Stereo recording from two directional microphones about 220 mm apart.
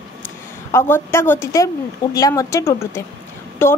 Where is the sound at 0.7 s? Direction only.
10° left (ahead or behind).